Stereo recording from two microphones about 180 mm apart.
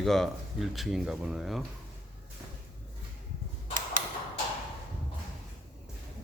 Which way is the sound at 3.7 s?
50° right (ahead or behind).